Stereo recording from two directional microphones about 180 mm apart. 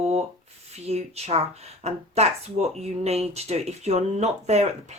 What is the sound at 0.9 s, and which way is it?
Speech, 35° right (ahead or behind).